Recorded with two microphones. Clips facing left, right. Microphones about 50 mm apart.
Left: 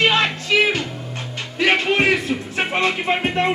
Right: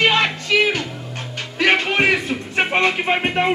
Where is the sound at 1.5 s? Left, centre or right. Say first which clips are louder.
Even; centre.